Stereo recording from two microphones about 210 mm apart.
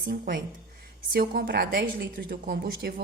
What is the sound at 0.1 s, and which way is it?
A woman's voice, 45° right (ahead or behind).